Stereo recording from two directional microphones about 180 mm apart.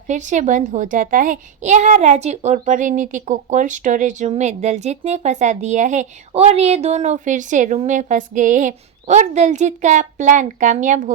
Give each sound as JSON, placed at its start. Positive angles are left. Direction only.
{"t": 0.1, "sound": "a child's voice", "side_deg": -45}